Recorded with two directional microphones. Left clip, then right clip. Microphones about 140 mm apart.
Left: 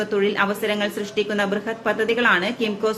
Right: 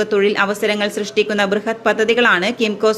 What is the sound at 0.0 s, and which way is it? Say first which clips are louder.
A woman's voice: right 5 dB; 40° right (ahead or behind).